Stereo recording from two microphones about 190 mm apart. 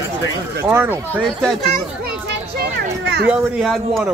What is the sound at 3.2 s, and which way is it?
Speech, 5° right (ahead or behind).